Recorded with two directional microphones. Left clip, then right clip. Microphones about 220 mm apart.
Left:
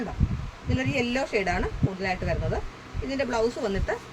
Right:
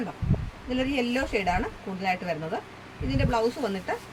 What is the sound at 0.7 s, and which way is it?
Speech, 30° left (ahead or behind).